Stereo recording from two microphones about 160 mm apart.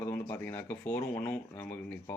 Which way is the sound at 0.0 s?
10° left (ahead or behind).